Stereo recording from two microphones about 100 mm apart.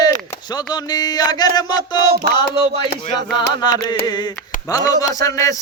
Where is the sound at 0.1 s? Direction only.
45° left (ahead or behind).